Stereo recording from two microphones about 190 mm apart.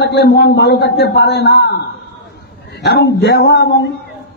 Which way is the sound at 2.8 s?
60° left (ahead or behind).